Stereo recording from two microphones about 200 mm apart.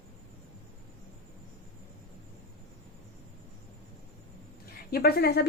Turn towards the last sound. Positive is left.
turn(degrees=55)  # may be behind; listen again after turning